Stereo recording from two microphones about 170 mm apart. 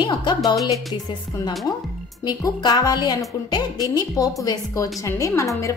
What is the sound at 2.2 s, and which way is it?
A woman's voice, 25° left (ahead or behind).